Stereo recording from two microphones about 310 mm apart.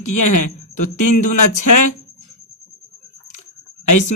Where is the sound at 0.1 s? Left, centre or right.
Left.